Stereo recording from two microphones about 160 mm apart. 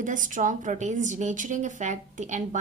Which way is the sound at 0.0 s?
55° right (ahead or behind).